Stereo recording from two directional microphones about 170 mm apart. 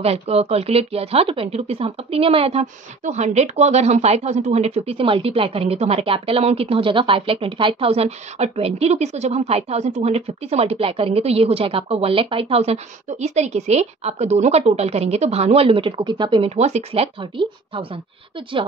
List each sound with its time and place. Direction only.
0.0 s a woman's voice: 35° right (ahead or behind)